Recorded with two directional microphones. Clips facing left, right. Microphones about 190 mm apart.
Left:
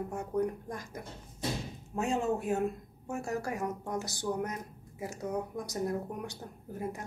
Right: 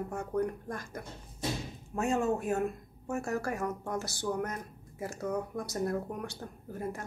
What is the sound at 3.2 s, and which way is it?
Speech, 15° left (ahead or behind).